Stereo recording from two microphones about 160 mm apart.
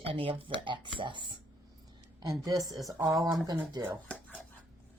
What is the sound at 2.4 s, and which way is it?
Speech, 20° right (ahead or behind).